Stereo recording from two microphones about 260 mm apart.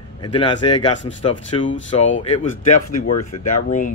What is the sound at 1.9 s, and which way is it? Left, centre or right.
Speech, left.